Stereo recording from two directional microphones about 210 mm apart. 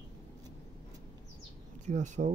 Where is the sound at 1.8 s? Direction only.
35° right (ahead or behind).